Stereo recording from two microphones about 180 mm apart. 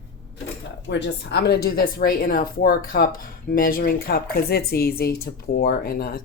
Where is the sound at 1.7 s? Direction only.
55° left (ahead or behind).